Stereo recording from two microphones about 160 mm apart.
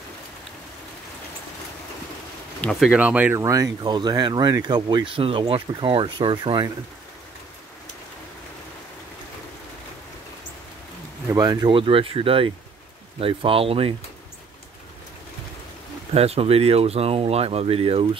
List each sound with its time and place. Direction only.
2.6 s speech: centre (ahead or behind)
3.3 s speech: 20° right (ahead or behind)
11.2 s speech: 25° right (ahead or behind)
16.1 s speech: 40° right (ahead or behind)